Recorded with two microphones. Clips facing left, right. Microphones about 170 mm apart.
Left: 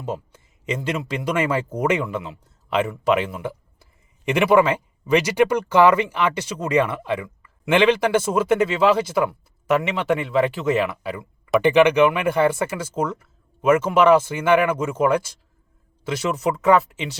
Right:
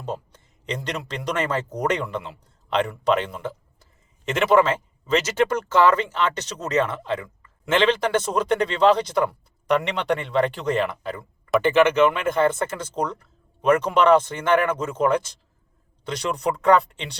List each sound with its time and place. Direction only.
0.0 s speech: 5° left (ahead or behind)